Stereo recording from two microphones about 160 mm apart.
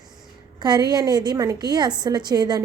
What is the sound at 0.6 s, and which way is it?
A woman's voice, 25° right (ahead or behind).